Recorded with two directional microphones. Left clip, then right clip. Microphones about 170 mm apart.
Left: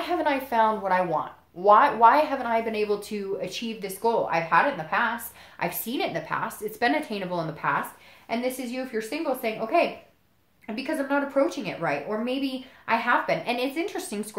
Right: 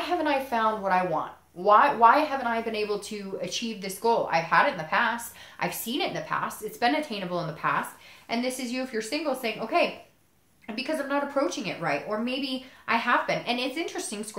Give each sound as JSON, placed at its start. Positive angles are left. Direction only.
{"t": 0.0, "sound": "a woman's voice", "side_deg": 50}